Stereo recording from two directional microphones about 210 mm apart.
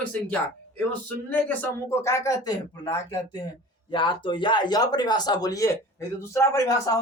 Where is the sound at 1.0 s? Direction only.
5° left (ahead or behind).